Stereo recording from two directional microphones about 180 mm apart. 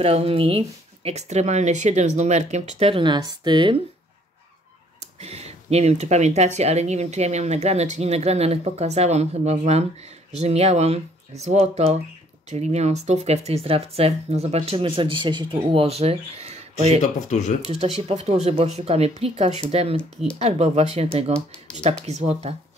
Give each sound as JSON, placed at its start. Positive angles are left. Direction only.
{"t": 0.0, "sound": "speech", "side_deg": -35}
{"t": 5.2, "sound": "speech", "side_deg": -35}
{"t": 17.0, "sound": "speech", "side_deg": 40}
{"t": 17.6, "sound": "speech", "side_deg": -35}
{"t": 20.0, "sound": "speech", "side_deg": 5}
{"t": 20.3, "sound": "speech", "side_deg": -35}